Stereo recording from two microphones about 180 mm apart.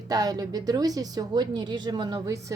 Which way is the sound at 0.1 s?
20° right (ahead or behind).